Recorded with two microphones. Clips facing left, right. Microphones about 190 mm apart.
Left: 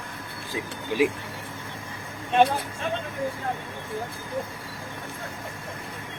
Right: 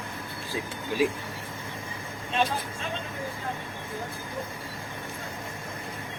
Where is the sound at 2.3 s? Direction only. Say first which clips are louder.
Left 7 dB; 60° left (ahead or behind).